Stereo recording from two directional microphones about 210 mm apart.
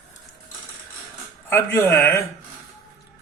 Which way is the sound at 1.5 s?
10° left (ahead or behind).